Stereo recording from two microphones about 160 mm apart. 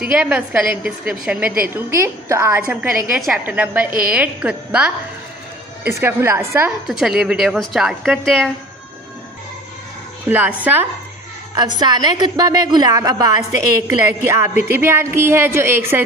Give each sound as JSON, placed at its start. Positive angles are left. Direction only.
{"t": 0.1, "sound": "a woman's voice", "side_deg": -10}
{"t": 1.9, "sound": "a woman's voice", "side_deg": -15}
{"t": 6.9, "sound": "a woman's voice", "side_deg": 0}
{"t": 10.2, "sound": "a woman's voice", "side_deg": -10}
{"t": 11.5, "sound": "a woman's voice", "side_deg": -25}